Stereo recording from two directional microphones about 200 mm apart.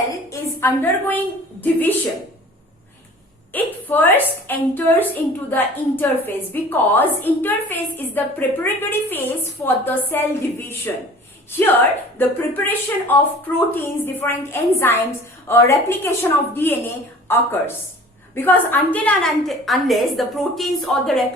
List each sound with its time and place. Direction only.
0.1 s a sound: 15° left (ahead or behind)
1.6 s a woman's voice: 10° left (ahead or behind)
3.5 s a woman's voice: 10° left (ahead or behind)